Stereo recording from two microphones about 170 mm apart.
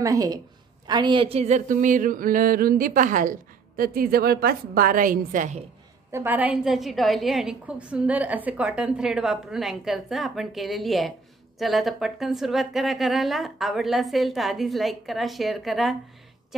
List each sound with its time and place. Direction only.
0.0 s a woman's voice: 20° right (ahead or behind)
0.8 s a sound: 25° right (ahead or behind); by 5.6 s 50° right (ahead or behind)
6.1 s a woman's voice: 10° right (ahead or behind)